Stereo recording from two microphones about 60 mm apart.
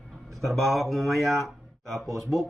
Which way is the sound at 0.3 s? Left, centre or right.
Centre.